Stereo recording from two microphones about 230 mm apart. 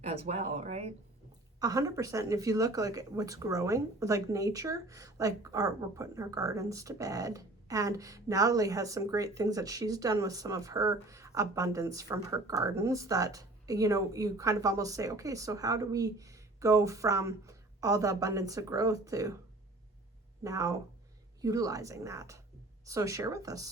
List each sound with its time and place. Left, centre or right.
0.0 s speech: right
1.5 s speech: centre
20.4 s speech: centre